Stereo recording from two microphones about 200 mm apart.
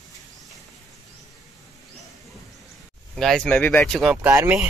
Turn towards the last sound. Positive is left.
turn(degrees=-15)  # may be behind; listen again after turning